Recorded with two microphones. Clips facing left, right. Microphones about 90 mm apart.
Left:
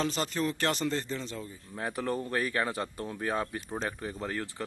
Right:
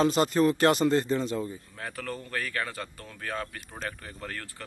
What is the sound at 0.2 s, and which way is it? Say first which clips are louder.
A man's voice: right 8 dB; 45° right (ahead or behind).